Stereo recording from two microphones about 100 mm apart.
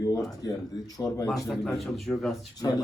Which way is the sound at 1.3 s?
Centre (ahead or behind).